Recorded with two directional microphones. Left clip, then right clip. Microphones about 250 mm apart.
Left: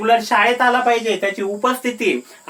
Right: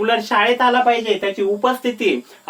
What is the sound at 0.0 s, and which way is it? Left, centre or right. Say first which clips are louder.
Speech: left 2 dB; centre.